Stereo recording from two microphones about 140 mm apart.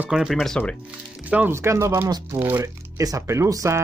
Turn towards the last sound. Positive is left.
turn(degrees=-20)  # may be behind; listen again after turning